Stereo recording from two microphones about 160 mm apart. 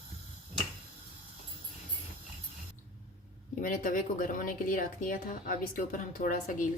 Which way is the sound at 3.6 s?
55° left (ahead or behind).